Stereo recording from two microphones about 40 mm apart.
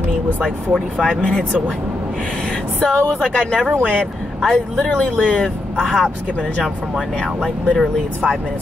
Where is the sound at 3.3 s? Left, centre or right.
Left.